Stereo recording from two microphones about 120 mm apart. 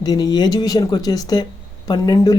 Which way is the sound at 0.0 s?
35° left (ahead or behind).